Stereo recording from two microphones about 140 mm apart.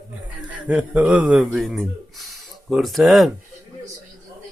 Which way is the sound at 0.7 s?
10° right (ahead or behind).